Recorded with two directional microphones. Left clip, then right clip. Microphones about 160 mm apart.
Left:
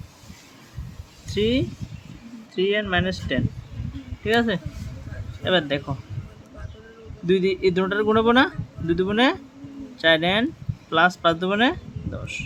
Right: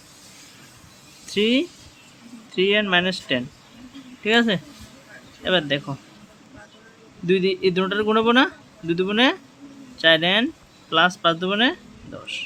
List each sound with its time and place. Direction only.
1.3 s speech: 20° right (ahead or behind)
5.4 s a man's voice: 5° right (ahead or behind)
7.3 s a man's voice: 5° right (ahead or behind)